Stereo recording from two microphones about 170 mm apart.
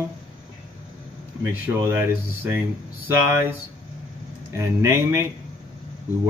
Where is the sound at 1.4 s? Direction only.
15° right (ahead or behind).